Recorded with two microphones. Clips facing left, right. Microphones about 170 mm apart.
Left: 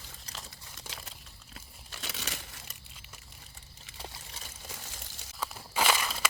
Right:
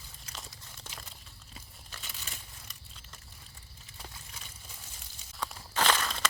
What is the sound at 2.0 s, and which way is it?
Crumpling, 85° left.